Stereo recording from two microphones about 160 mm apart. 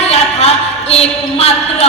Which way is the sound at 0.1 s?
40° left (ahead or behind).